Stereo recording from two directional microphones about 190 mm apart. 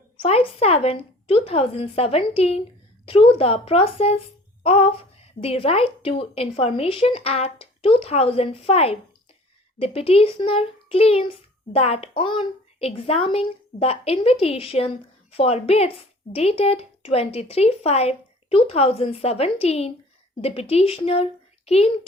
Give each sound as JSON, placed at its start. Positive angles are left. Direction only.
{"t": 0.2, "sound": "a child's voice", "side_deg": 30}